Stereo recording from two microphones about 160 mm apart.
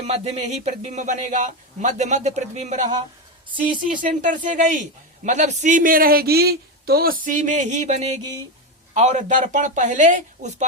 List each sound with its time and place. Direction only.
0.0 s a man's voice: 40° right (ahead or behind)